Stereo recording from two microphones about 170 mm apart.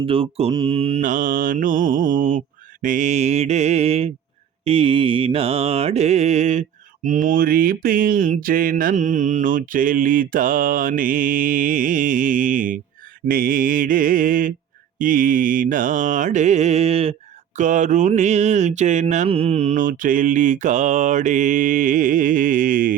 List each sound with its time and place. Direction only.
0.0 s mantra: 35° right (ahead or behind)
1.0 s mantra: 50° right (ahead or behind)
17.6 s mantra: 45° right (ahead or behind)
19.7 s mantra: 55° right (ahead or behind)